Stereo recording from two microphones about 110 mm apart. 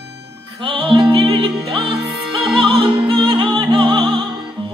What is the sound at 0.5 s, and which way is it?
Music, 50° right (ahead or behind).